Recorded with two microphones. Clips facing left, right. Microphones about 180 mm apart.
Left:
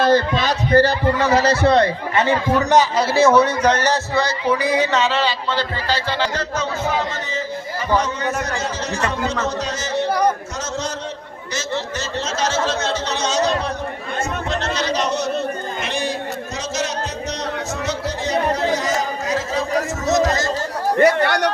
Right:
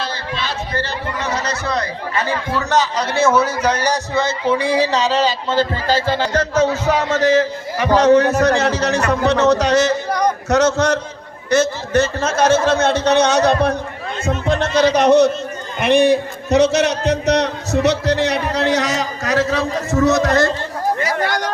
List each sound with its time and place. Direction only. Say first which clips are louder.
0.0 s a man's voice: left 9 dB; 45° left (ahead or behind); by 4.4 s 20° right (ahead or behind)
4.5 s speech: right 2 dB; 30° right (ahead or behind); by 6.7 s 45° right (ahead or behind)
6.8 s speech: right 7 dB; 80° right
10.1 s a sound: even; 5° left (ahead or behind)
10.5 s speech: right 12 dB; 70° right (ahead or behind)
11.5 s speech: right 10 dB; 60° right (ahead or behind)
15.8 s a sound: right 15 dB; 60° right (ahead or behind)
21.0 s speech: left 5 dB; 60° left (ahead or behind)